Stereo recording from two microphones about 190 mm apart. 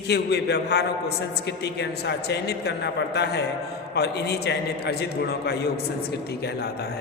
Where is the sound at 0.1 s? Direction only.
60° left (ahead or behind).